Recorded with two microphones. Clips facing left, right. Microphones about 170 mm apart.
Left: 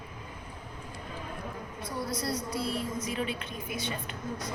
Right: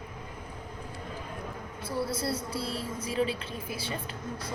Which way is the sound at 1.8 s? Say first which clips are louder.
Right 3 dB; 30° right (ahead or behind).